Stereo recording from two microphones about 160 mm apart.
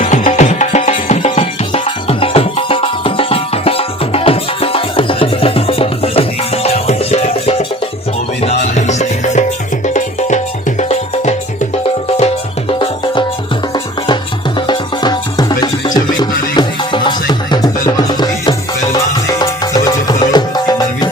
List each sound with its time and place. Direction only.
0.0 s music: 50° left (ahead or behind)
14.7 s music: 25° left (ahead or behind)